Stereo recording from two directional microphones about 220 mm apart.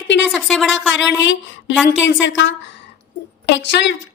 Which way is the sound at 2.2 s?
55° left (ahead or behind).